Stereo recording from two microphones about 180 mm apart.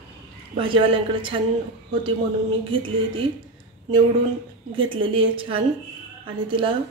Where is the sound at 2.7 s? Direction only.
30° right (ahead or behind).